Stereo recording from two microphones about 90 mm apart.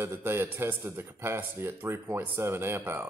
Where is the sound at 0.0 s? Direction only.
25° right (ahead or behind).